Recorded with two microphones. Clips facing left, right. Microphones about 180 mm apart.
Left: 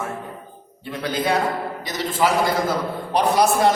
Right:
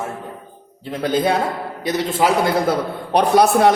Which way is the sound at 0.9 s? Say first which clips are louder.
Right 4 dB; 50° right (ahead or behind).